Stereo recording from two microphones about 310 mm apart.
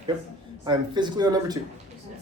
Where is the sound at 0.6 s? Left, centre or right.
Centre.